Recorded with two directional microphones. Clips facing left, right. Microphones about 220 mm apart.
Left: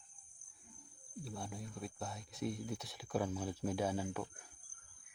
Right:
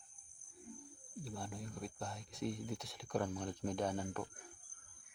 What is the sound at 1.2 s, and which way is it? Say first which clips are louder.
Speech: even; centre (ahead or behind).